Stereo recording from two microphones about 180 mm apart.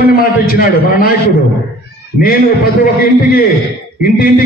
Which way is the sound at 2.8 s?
50° left (ahead or behind).